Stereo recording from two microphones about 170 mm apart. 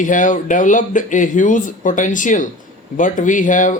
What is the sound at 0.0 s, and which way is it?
Speech, 50° left (ahead or behind).